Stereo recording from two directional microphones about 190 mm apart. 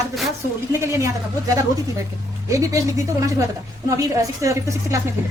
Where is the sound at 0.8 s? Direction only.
15° right (ahead or behind).